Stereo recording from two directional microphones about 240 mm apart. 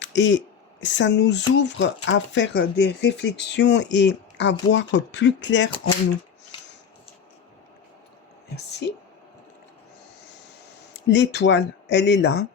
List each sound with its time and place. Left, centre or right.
0.0 s speech: left
8.8 s speech: left
10.9 s speech: left